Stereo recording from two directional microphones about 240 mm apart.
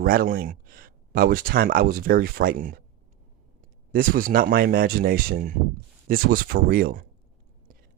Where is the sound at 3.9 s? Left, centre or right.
Right.